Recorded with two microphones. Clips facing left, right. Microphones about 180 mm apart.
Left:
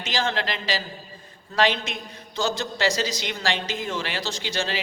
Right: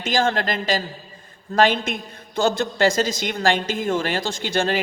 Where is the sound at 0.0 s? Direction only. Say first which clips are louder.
Right 5 dB; 50° right (ahead or behind).